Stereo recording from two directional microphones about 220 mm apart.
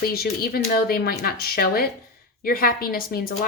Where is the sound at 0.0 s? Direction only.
45° left (ahead or behind).